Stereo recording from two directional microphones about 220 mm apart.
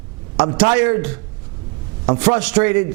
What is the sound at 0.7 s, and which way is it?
Speech, 15° right (ahead or behind).